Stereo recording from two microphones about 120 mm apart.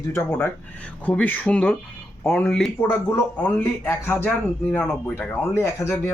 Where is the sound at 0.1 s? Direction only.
15° left (ahead or behind).